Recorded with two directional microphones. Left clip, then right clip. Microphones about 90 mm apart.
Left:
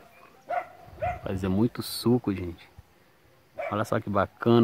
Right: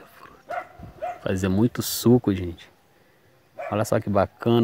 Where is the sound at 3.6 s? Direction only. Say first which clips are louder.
Right 4 dB; 20° right (ahead or behind).